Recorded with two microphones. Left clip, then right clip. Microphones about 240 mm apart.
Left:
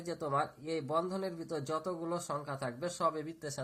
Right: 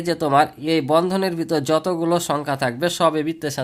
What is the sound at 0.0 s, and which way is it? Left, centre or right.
Speech, right.